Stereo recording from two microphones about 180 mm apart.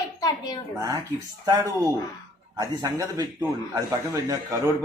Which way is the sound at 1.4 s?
20° right (ahead or behind).